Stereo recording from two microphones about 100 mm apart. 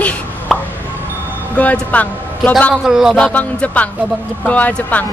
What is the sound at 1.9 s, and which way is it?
Speech, 15° left (ahead or behind).